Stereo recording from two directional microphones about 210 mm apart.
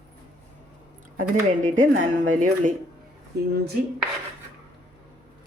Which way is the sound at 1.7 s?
40° right (ahead or behind).